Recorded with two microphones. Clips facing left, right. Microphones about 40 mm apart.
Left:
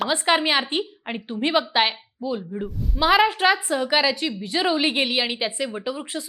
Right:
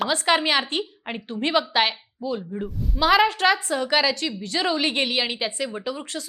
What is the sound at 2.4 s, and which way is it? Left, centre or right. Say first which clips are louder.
Speech: even; centre.